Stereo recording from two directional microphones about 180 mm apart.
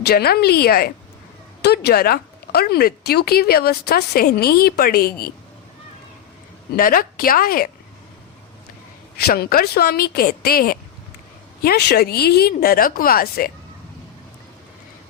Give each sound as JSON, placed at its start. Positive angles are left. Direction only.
{"t": 0.0, "sound": "speech", "side_deg": 60}
{"t": 6.7, "sound": "a woman's voice", "side_deg": 55}
{"t": 9.1, "sound": "speech", "side_deg": 60}